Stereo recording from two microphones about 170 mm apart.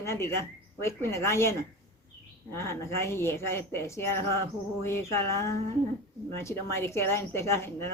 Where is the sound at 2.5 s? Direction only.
15° left (ahead or behind).